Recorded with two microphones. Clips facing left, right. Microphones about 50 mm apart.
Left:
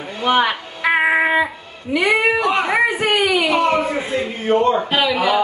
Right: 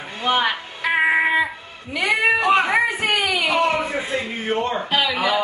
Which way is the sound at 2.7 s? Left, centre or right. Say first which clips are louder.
Left 3 dB; centre.